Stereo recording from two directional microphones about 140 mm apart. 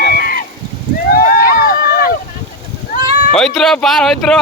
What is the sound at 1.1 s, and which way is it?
Rowboat, 90° left.